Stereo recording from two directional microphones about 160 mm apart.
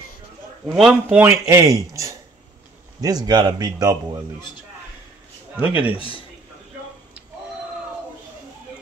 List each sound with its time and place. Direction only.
0.7 s speech: centre (ahead or behind)
1.0 s a man's voice: 15° right (ahead or behind)
3.0 s speech: 25° right (ahead or behind)
5.6 s a man's voice: 10° right (ahead or behind)
5.9 s a man's voice: 35° left (ahead or behind)